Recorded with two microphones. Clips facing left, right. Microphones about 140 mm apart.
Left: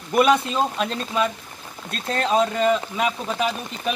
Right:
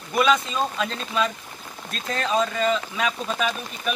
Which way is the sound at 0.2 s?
25° left (ahead or behind).